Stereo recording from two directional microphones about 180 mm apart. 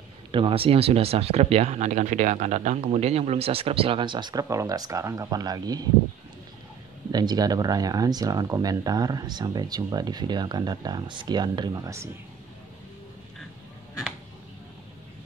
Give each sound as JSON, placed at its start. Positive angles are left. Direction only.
{"t": 0.3, "sound": "speech", "side_deg": -30}
{"t": 7.1, "sound": "speech", "side_deg": -20}